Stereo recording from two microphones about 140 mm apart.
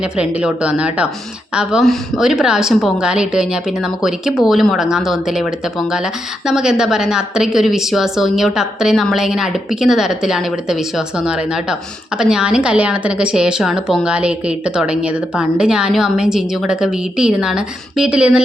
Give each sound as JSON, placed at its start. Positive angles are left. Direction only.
{"t": 0.0, "sound": "a woman's voice", "side_deg": -5}